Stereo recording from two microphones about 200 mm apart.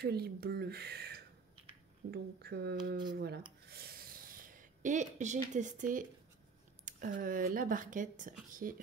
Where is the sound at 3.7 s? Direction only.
50° right (ahead or behind).